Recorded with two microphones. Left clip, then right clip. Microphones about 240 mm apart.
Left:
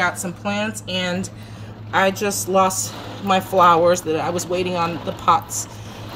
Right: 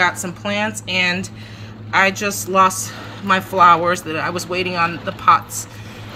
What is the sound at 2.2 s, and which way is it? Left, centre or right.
Speech, right.